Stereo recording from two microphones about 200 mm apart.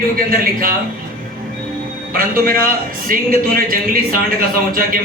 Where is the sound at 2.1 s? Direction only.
45° right (ahead or behind).